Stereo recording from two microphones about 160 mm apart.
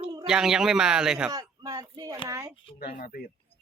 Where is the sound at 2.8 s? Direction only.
70° left (ahead or behind).